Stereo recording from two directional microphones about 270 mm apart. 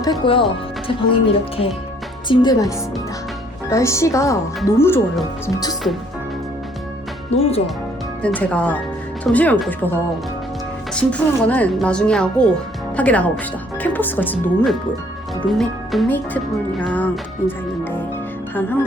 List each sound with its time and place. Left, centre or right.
0.0 s speech: centre
7.3 s speech: left
8.2 s speech: centre
10.9 s speech: centre
17.4 s speech: centre